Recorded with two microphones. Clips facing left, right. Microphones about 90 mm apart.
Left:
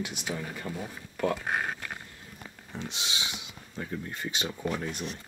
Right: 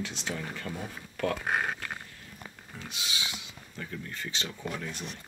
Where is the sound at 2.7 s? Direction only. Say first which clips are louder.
Left 3 dB; 25° left (ahead or behind).